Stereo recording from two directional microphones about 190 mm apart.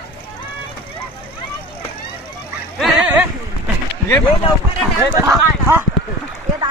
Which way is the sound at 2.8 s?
5° right (ahead or behind).